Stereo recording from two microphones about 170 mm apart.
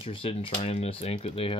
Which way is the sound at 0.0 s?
30° left (ahead or behind).